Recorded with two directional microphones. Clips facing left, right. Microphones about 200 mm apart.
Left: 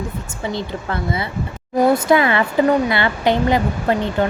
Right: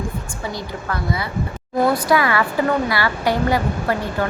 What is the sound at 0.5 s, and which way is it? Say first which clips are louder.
Speech: left 4 dB; 25° left (ahead or behind).